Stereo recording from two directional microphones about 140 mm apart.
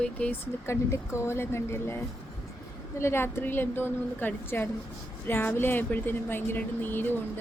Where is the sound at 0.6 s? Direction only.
20° left (ahead or behind).